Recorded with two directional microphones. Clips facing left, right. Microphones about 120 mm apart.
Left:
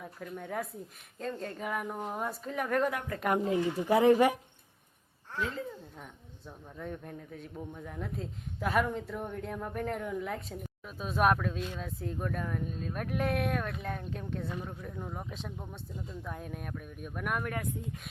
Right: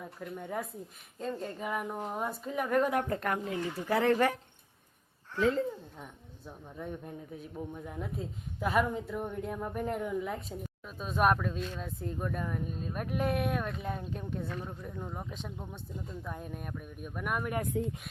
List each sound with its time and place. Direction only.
0.0 s speech: 5° right (ahead or behind)
3.1 s speech: 25° right (ahead or behind)
3.6 s speech: 15° left (ahead or behind)
6.0 s speech: 5° right (ahead or behind)
17.7 s speech: 90° right